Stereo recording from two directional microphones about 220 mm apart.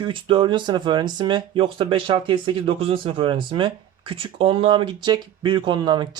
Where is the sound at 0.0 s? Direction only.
20° right (ahead or behind).